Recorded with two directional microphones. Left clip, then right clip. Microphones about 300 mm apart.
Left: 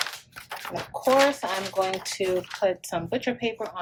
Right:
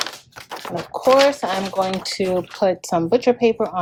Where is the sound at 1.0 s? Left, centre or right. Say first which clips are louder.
Right 6 dB; right.